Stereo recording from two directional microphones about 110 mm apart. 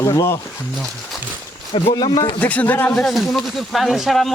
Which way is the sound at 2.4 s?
15° left (ahead or behind).